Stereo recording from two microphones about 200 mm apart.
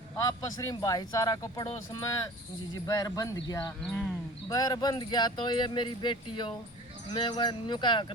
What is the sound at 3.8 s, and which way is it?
Speech, 5° left (ahead or behind).